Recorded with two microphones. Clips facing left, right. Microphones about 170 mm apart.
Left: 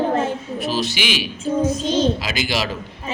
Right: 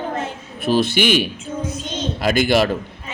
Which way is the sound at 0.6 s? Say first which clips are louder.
Right 7 dB; 55° right (ahead or behind).